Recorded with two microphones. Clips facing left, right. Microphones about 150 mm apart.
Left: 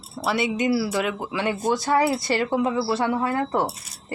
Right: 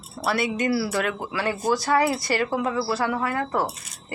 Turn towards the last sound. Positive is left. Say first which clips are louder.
# left 2 dB
turn(degrees=25)  # may be behind; listen again after turning